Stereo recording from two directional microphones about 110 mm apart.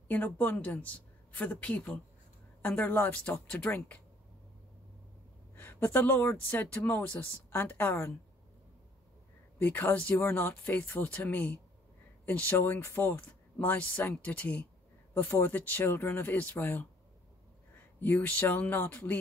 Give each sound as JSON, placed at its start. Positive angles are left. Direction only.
{"t": 0.1, "sound": "speech", "side_deg": 15}
{"t": 5.6, "sound": "speech", "side_deg": 20}
{"t": 9.6, "sound": "speech", "side_deg": 15}
{"t": 18.0, "sound": "speech", "side_deg": 15}